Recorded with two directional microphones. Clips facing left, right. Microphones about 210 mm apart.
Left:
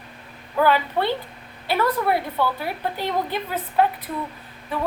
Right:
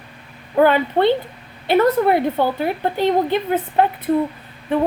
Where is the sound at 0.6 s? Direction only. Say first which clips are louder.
Right 6 dB; 25° right (ahead or behind).